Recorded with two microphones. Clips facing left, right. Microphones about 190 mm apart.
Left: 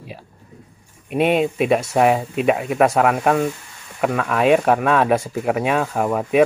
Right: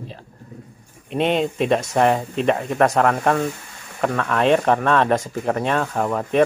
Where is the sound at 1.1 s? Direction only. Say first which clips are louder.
Left 2 dB; 5° left (ahead or behind).